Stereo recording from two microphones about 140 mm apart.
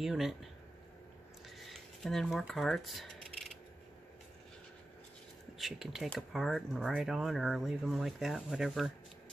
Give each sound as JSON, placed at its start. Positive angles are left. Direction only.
{"t": 0.0, "sound": "speech", "side_deg": 0}
{"t": 1.7, "sound": "a sound", "side_deg": 0}
{"t": 5.6, "sound": "speech", "side_deg": 0}